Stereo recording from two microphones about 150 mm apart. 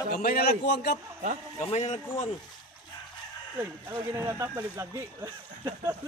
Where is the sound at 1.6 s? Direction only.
50° left (ahead or behind).